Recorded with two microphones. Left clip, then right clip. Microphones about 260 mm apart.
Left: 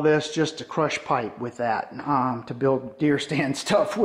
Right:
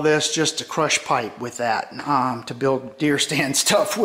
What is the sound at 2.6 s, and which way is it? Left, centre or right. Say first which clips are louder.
Speech: right 1 dB; centre.